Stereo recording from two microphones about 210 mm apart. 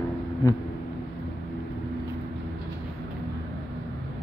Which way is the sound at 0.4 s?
20° left (ahead or behind).